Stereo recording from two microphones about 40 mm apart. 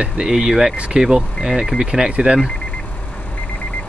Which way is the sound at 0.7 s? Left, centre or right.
Right.